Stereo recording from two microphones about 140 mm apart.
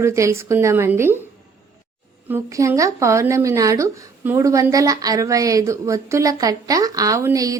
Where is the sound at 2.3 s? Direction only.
20° right (ahead or behind).